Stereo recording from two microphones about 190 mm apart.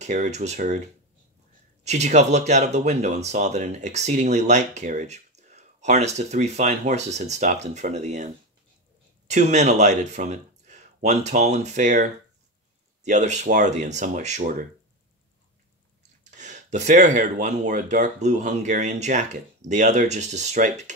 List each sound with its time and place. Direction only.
0.0 s speech: 35° right (ahead or behind)
1.9 s speech: 35° right (ahead or behind)
9.3 s speech: 40° right (ahead or behind)
16.0 s speech: 40° right (ahead or behind)